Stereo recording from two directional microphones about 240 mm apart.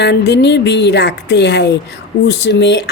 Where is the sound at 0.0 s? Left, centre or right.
Left.